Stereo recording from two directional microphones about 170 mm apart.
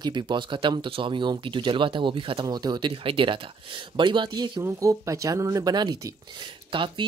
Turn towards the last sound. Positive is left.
turn(degrees=-30)  # may be behind; listen again after turning